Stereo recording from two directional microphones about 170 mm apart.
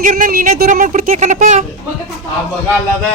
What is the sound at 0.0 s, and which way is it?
Speech, 50° right (ahead or behind).